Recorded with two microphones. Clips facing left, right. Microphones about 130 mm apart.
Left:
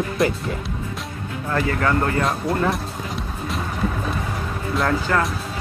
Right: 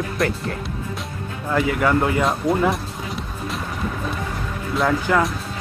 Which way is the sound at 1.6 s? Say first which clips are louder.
Right 2 dB; 10° right (ahead or behind).